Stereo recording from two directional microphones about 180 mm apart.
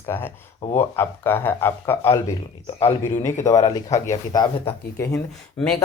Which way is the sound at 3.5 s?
20° left (ahead or behind).